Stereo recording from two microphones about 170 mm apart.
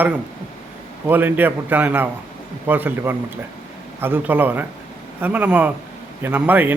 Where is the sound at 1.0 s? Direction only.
10° right (ahead or behind).